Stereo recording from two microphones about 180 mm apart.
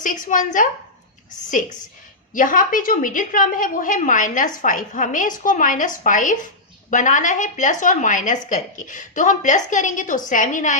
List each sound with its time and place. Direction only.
0.0 s a woman's voice: 45° left (ahead or behind)
2.3 s a woman's voice: 45° left (ahead or behind)